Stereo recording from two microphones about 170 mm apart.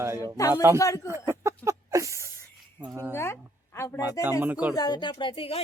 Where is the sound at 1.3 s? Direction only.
15° right (ahead or behind).